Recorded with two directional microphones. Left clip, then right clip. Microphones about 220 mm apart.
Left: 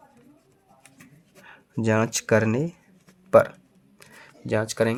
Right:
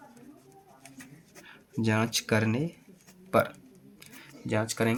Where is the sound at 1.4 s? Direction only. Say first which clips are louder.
Left 6 dB; 45° left (ahead or behind).